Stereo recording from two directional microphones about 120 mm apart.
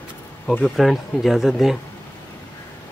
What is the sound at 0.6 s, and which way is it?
Speech, centre (ahead or behind).